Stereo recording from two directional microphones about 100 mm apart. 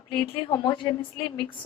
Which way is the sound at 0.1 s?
50° left (ahead or behind).